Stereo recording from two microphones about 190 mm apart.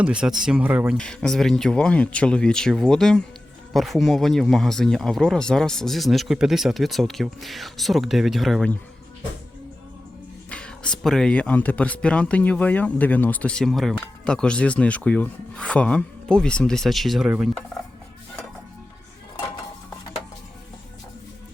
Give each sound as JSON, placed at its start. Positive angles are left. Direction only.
{"t": 0.0, "sound": "speech", "side_deg": -5}
{"t": 0.9, "sound": "speech", "side_deg": 5}
{"t": 10.5, "sound": "speech", "side_deg": 5}